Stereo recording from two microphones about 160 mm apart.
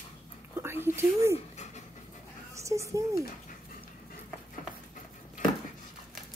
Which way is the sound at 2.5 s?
20° right (ahead or behind).